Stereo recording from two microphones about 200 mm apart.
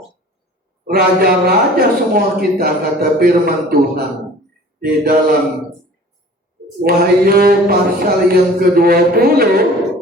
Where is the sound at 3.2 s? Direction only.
50° right (ahead or behind).